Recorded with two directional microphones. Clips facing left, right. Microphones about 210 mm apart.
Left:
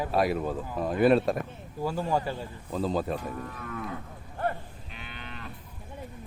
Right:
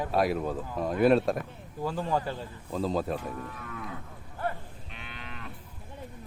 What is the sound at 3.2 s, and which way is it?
Moo, 40° left (ahead or behind).